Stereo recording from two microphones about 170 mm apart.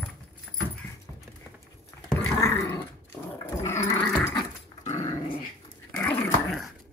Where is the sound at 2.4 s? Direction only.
15° left (ahead or behind).